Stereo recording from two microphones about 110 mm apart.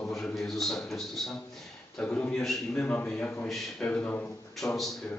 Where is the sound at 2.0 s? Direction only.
10° left (ahead or behind).